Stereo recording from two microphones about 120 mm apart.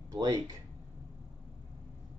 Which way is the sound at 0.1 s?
30° right (ahead or behind).